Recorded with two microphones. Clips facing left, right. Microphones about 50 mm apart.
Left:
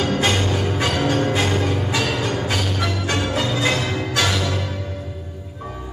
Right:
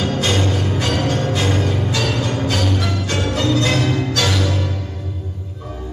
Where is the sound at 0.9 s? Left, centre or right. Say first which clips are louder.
Even; centre.